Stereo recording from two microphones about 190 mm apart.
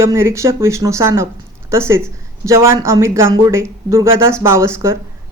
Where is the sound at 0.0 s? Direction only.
15° right (ahead or behind).